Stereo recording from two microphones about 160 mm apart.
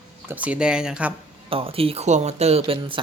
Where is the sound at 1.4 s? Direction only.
35° right (ahead or behind).